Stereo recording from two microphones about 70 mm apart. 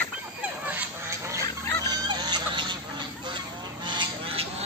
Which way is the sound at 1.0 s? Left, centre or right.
Right.